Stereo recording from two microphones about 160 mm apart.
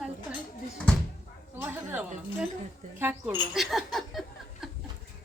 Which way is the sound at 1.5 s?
10° right (ahead or behind).